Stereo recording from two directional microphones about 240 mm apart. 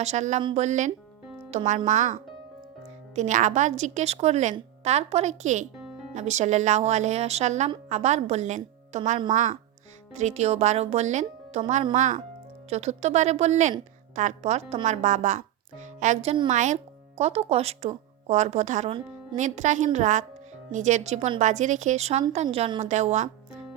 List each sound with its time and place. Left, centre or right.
0.0 s a woman's voice: right
3.2 s a woman's voice: right